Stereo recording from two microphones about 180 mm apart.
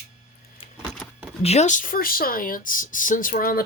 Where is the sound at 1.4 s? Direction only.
35° left (ahead or behind); by 3.6 s 55° left (ahead or behind).